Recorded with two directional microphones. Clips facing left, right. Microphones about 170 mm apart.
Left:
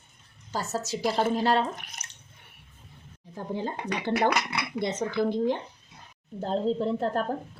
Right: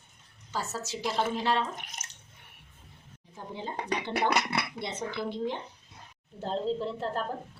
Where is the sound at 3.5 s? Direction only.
45° left (ahead or behind).